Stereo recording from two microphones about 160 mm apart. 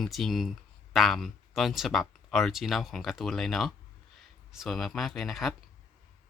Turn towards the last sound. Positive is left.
turn(degrees=0)  # may be behind; listen again after turning